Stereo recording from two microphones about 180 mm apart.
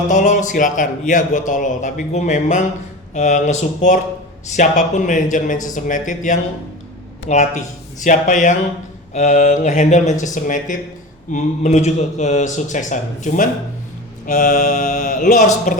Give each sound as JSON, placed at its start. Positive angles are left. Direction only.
{"t": 0.1, "sound": "speech", "side_deg": 45}